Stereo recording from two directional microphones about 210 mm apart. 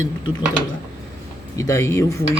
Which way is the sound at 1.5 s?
15° left (ahead or behind).